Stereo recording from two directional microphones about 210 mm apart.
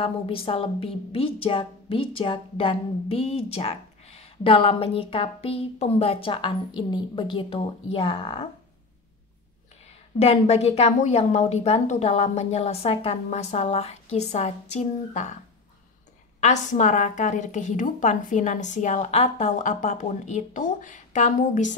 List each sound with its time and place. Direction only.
0.0 s a woman's voice: 25° left (ahead or behind)
10.1 s a woman's voice: 30° left (ahead or behind)
16.3 s a woman's voice: 35° left (ahead or behind)